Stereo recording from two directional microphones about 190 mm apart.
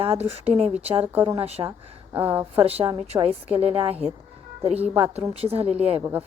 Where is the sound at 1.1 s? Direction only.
15° right (ahead or behind).